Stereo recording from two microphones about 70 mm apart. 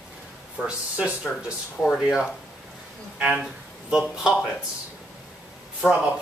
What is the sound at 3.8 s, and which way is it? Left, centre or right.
Speech, centre.